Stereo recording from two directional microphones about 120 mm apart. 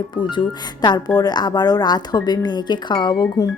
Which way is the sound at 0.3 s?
35° left (ahead or behind).